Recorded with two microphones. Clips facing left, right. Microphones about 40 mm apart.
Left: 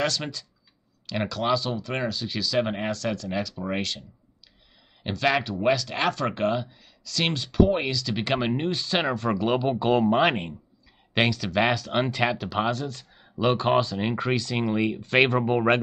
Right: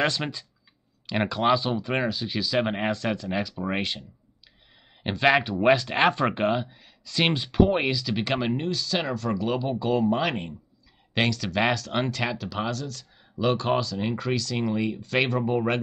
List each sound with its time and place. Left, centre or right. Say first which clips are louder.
0.0 s speech: right 1 dB; right
5.0 s speech: right 3 dB; right
8.1 s speech: even; centre
8.5 s speech: left 2 dB; left
11.1 s speech: left 2 dB; centre; by 15.8 s left